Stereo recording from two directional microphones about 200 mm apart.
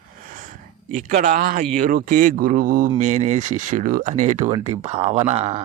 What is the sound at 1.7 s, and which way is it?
Speech, 45° right (ahead or behind).